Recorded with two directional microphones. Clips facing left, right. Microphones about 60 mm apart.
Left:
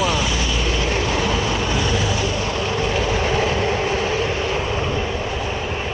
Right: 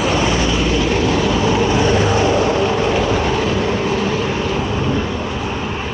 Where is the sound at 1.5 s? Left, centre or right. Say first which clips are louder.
Right 7 dB; right.